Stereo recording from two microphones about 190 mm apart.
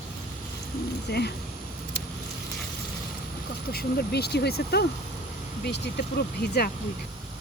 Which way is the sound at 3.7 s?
55° left (ahead or behind).